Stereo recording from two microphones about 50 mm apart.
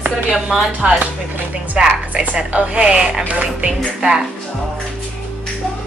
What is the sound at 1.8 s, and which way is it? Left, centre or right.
Music, centre.